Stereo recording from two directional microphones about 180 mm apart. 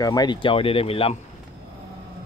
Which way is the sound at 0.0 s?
20° left (ahead or behind).